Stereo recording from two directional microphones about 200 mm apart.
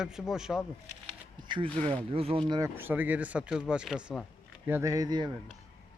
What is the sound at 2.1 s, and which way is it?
Speech, 30° right (ahead or behind).